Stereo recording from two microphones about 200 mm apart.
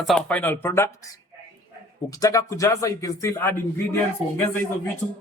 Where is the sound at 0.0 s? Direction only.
5° left (ahead or behind).